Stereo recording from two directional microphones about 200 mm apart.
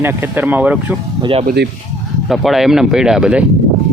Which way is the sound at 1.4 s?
55° right (ahead or behind).